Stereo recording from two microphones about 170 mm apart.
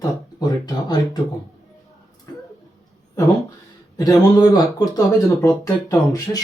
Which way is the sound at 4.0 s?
20° left (ahead or behind).